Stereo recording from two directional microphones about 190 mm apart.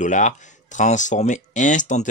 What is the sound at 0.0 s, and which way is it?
Speech, 40° left (ahead or behind).